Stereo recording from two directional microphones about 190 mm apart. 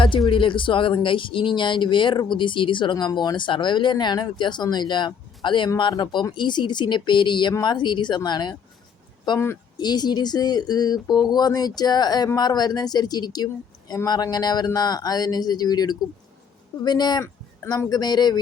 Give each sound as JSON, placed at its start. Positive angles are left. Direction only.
{"t": 0.3, "sound": "speech", "side_deg": 25}